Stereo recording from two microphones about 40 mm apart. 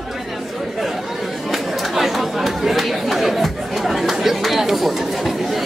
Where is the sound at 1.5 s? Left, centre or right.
Centre.